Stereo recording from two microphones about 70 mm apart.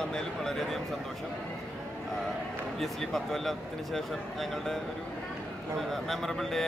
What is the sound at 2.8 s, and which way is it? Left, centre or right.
Speech, centre.